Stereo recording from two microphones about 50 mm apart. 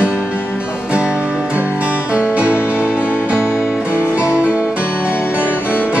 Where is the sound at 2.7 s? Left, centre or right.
Left.